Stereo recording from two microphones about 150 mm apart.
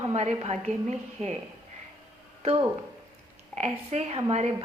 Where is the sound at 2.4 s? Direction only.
40° right (ahead or behind).